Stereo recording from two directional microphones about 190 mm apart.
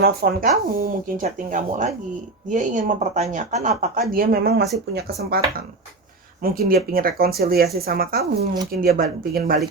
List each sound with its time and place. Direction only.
0.0 s speech: 50° right (ahead or behind)
4.1 s speech: 50° right (ahead or behind)